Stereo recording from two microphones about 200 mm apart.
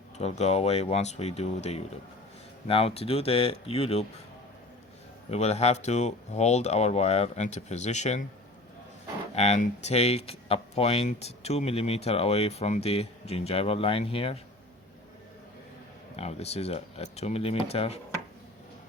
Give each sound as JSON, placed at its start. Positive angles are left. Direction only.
{"t": 0.2, "sound": "speech", "side_deg": 35}
{"t": 5.3, "sound": "speech", "side_deg": 35}
{"t": 9.3, "sound": "speech", "side_deg": 35}
{"t": 16.1, "sound": "speech", "side_deg": 30}